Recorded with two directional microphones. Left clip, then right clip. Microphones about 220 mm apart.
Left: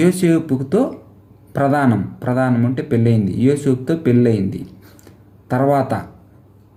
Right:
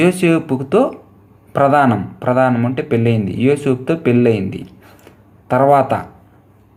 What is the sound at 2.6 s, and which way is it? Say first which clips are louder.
Speech: right 2 dB; 15° left (ahead or behind).